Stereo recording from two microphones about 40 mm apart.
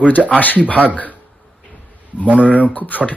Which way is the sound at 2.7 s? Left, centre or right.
Left.